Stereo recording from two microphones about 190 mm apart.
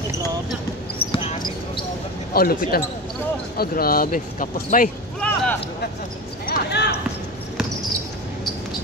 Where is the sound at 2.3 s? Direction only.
50° left (ahead or behind).